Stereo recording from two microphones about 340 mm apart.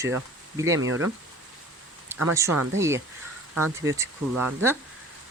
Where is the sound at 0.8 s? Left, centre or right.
Right.